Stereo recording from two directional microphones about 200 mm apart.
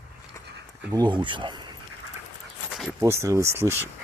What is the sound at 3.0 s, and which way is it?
Speech, 15° right (ahead or behind).